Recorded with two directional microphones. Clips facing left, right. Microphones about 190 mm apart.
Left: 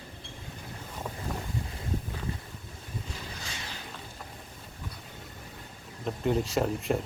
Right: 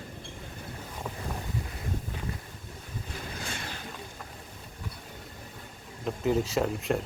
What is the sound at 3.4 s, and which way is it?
Boat, 55° right (ahead or behind).